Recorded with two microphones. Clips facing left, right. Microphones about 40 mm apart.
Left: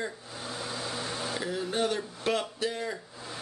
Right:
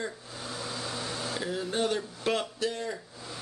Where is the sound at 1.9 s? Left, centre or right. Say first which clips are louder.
Even; centre.